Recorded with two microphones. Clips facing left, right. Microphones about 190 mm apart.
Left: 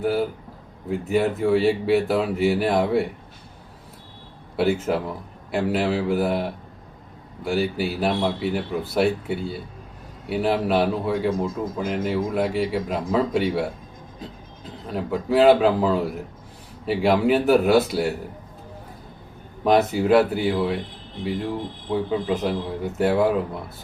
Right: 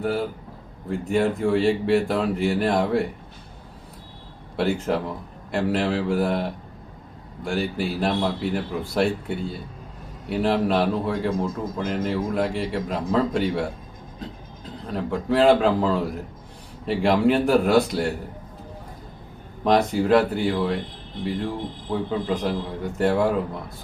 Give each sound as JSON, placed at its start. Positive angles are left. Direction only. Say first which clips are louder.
{"t": 0.0, "sound": "a man's voice", "louder": "left 2 dB", "side_deg": 5}
{"t": 4.5, "sound": "a man's voice", "louder": "left 2 dB", "side_deg": 0}
{"t": 14.8, "sound": "a man's voice", "louder": "even", "side_deg": 5}
{"t": 19.6, "sound": "a man's voice", "louder": "left 1 dB", "side_deg": 5}
{"t": 21.9, "sound": "a man's voice", "louder": "left 2 dB", "side_deg": 5}